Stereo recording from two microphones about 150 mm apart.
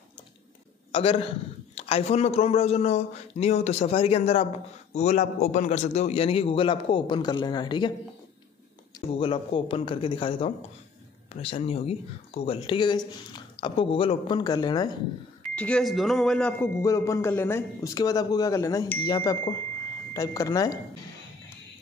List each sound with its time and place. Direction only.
0.9 s speech: 40° left (ahead or behind)
4.9 s speech: 55° left (ahead or behind); by 7.9 s 30° left (ahead or behind)
9.1 s speech: 35° left (ahead or behind)
15.4 s speech: 5° left (ahead or behind); by 20.8 s 25° left (ahead or behind)